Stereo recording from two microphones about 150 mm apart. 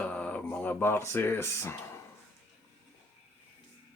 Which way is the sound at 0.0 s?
10° left (ahead or behind).